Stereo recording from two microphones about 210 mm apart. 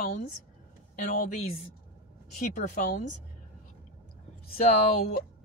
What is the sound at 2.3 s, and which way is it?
Speech, 35° left (ahead or behind).